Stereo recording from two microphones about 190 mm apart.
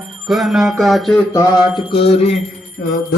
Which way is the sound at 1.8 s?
30° left (ahead or behind).